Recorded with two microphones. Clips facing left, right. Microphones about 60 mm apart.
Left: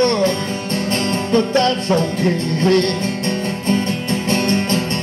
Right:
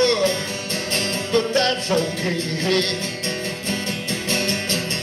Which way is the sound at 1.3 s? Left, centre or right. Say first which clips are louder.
Left 4 dB; left.